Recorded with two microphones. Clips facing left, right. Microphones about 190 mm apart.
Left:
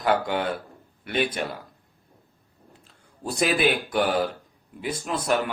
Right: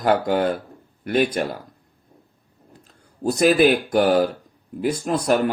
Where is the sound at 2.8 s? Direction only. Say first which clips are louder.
Right 9 dB; 40° right (ahead or behind).